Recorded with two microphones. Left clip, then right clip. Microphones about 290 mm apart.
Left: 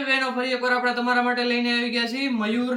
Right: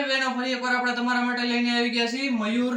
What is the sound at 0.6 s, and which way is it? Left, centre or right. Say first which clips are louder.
Speech: left 2 dB; centre.